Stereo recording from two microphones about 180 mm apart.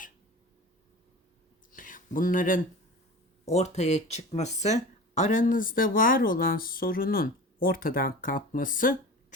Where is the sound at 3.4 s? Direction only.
35° left (ahead or behind).